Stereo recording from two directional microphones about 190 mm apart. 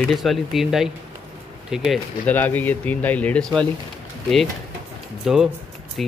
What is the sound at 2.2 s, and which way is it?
Speech, 10° left (ahead or behind).